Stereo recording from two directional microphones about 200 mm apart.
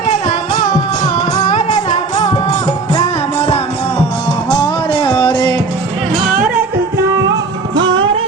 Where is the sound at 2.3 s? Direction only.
35° left (ahead or behind).